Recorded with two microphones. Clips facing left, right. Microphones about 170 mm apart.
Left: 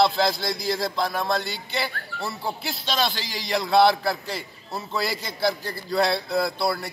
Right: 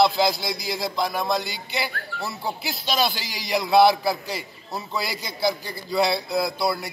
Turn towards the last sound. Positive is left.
turn(degrees=0)  # may be behind; listen again after turning